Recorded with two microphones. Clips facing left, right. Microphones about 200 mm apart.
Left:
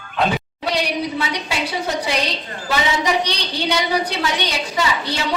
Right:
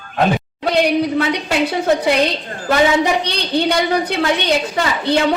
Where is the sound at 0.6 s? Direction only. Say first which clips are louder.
Right 7 dB; 55° right (ahead or behind).